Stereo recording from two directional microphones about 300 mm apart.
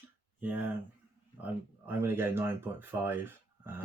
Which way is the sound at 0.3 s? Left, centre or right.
Centre.